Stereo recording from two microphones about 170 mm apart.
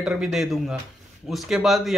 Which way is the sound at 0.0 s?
5° right (ahead or behind).